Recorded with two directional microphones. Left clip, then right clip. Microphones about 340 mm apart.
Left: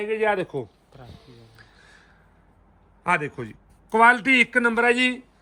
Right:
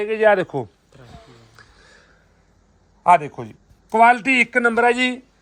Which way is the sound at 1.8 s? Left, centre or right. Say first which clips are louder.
Right 2 dB; centre.